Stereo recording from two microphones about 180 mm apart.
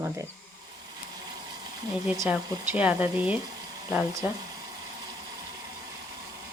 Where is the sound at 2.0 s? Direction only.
15° right (ahead or behind).